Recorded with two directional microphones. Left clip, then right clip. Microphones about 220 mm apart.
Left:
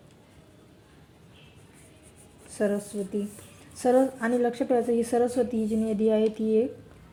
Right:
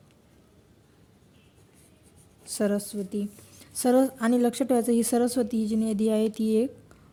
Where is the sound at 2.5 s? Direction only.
50° right (ahead or behind).